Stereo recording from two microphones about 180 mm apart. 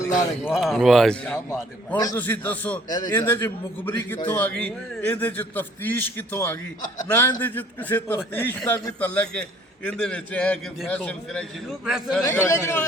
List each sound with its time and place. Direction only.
0.4 s speech: centre (ahead or behind)
1.5 s a man's voice: 20° left (ahead or behind); by 12.2 s centre (ahead or behind)
12.2 s a man's voice: 15° left (ahead or behind)